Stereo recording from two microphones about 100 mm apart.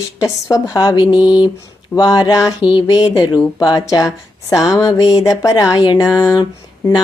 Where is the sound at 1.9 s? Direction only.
40° left (ahead or behind).